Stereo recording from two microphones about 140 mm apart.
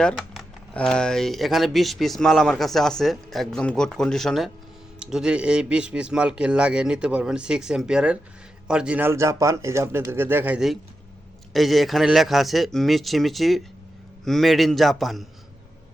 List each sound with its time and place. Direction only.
0.7 s a man's voice: 5° left (ahead or behind)